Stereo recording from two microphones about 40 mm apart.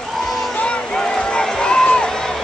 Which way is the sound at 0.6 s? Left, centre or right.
Left.